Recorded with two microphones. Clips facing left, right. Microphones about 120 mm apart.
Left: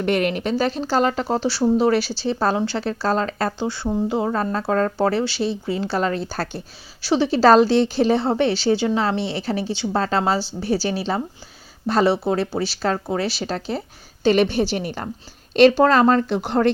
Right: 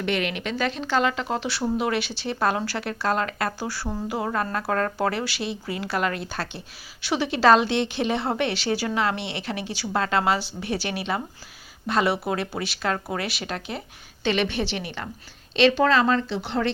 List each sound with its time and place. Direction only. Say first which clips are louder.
0.0 s a woman's voice: left 6 dB; 45° left (ahead or behind)